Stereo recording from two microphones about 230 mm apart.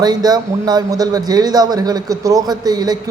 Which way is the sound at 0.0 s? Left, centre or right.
Centre.